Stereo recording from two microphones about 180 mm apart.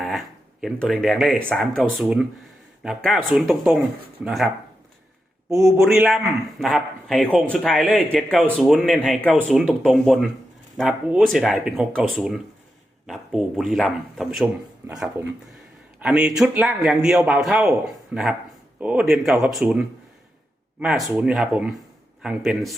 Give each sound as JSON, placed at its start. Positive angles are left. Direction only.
{"t": 0.6, "sound": "speech", "side_deg": 0}
{"t": 5.5, "sound": "speech", "side_deg": -15}
{"t": 5.8, "sound": "speech", "side_deg": 0}